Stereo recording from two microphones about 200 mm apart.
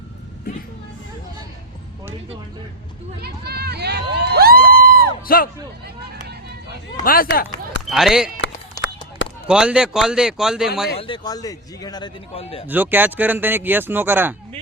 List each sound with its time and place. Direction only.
3.2 s a sound: 55° right (ahead or behind)
4.7 s crowd: 50° right (ahead or behind)
5.2 s a man's voice: 45° left (ahead or behind)
7.0 s speech: 45° left (ahead or behind)
7.9 s a man's voice: centre (ahead or behind)
9.5 s a man's voice: 5° right (ahead or behind)
11.0 s a man's voice: 20° left (ahead or behind)
12.6 s speech: 10° right (ahead or behind)